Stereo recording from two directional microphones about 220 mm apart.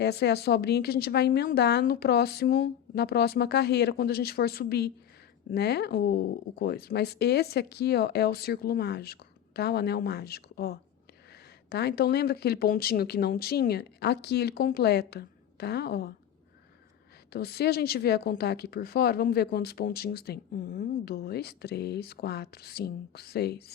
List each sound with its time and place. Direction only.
0.0 s speech: 50° left (ahead or behind)
17.3 s speech: 45° left (ahead or behind)